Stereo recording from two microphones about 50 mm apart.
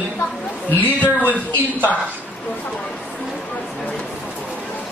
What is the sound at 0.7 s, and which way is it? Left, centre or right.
Speech, left.